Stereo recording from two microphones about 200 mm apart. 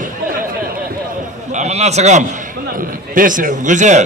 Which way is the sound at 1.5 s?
35° right (ahead or behind).